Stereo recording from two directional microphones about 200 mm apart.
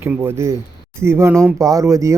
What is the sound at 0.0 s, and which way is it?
Speech, 10° right (ahead or behind).